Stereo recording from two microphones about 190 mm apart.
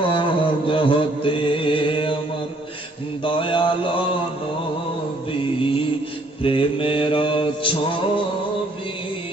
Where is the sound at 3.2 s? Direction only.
25° left (ahead or behind).